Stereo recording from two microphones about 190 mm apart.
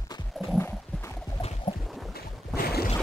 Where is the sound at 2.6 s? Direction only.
55° left (ahead or behind).